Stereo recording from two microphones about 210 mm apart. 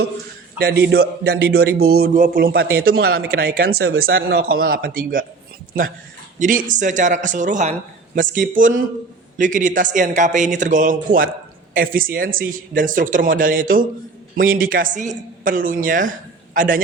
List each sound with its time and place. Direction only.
0.6 s a man's voice: 50° right (ahead or behind)
6.4 s speech: 40° right (ahead or behind)